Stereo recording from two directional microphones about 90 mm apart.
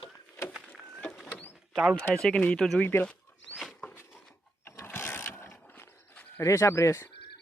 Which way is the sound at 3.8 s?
25° left (ahead or behind).